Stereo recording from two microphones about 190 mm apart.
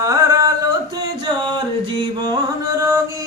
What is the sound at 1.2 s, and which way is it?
Music, 25° right (ahead or behind).